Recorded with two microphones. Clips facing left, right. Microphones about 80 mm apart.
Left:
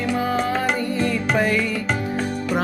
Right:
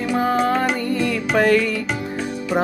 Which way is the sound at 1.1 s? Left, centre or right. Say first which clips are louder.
Right 6 dB; right.